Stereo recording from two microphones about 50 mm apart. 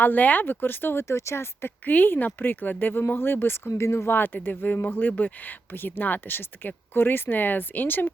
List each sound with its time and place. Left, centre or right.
0.0 s speech: left
1.0 s speech: left
1.8 s speech: left